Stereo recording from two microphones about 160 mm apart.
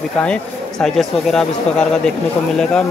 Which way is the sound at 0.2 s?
5° left (ahead or behind).